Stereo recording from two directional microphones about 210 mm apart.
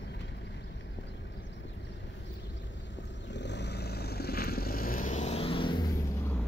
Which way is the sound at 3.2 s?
55° left (ahead or behind).